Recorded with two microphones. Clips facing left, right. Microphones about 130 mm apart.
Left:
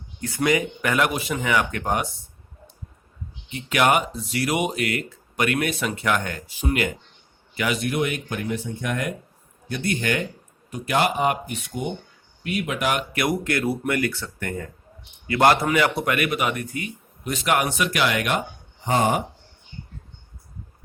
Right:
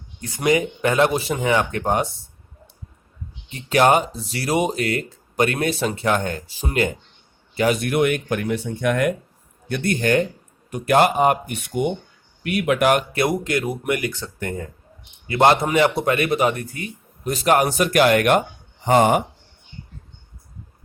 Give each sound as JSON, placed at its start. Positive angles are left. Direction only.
{"t": 0.2, "sound": "speech", "side_deg": -20}
{"t": 3.5, "sound": "a man's voice", "side_deg": -35}
{"t": 7.8, "sound": "a man's voice", "side_deg": -60}
{"t": 10.7, "sound": "a man's voice", "side_deg": -55}
{"t": 11.6, "sound": "speech", "side_deg": -65}
{"t": 13.1, "sound": "speech", "side_deg": -25}
{"t": 18.9, "sound": "speech", "side_deg": -65}